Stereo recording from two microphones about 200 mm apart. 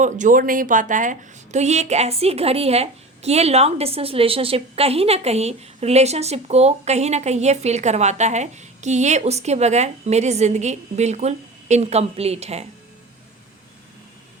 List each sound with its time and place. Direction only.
0.0 s a woman's voice: 40° right (ahead or behind)